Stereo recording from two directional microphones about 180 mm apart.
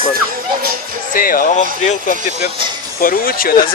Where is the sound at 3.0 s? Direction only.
55° left (ahead or behind).